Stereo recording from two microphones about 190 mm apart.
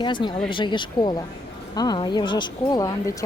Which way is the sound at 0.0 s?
25° left (ahead or behind).